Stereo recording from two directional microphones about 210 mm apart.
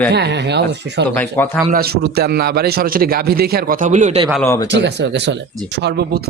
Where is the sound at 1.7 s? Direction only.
50° right (ahead or behind).